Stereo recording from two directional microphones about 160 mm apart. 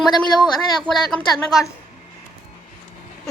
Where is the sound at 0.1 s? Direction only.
25° left (ahead or behind).